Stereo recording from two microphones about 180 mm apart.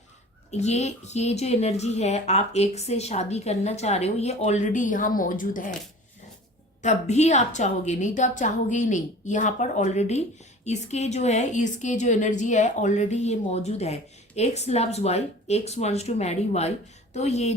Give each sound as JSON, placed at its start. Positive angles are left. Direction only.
{"t": 0.5, "sound": "a woman's voice", "side_deg": 40}
{"t": 6.8, "sound": "a woman's voice", "side_deg": 40}